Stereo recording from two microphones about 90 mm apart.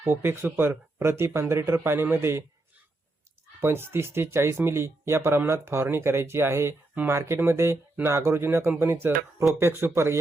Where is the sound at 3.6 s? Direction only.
25° right (ahead or behind).